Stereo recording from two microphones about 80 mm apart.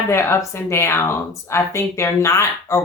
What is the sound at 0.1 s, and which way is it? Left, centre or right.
Speech, left.